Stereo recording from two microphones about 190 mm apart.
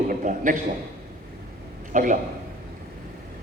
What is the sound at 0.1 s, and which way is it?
Speech, 45° right (ahead or behind).